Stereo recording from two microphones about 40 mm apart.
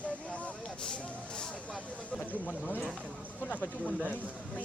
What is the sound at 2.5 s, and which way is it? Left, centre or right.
Speech, left.